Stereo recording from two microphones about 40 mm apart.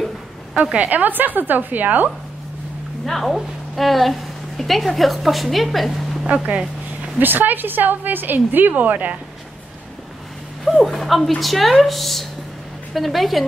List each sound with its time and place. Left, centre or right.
0.6 s a woman's voice: right
0.8 s a woman's voice: right
3.1 s a woman's voice: centre
6.2 s speech: right
7.2 s a woman's voice: right
10.6 s a woman's voice: centre